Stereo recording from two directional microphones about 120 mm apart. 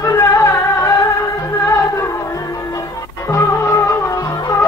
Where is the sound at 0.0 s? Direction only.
25° left (ahead or behind).